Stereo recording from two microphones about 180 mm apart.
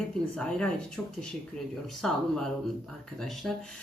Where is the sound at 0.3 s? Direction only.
5° left (ahead or behind).